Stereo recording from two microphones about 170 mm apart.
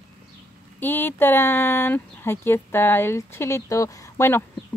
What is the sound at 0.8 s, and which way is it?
Speech, 10° left (ahead or behind).